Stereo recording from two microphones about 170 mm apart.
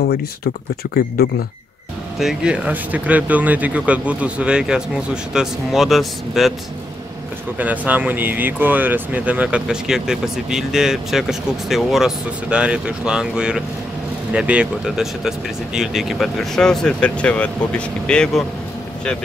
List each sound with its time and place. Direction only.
0.9 s speech: 65° left (ahead or behind)
2.1 s speech: 5° right (ahead or behind)
7.5 s speech: 10° right (ahead or behind)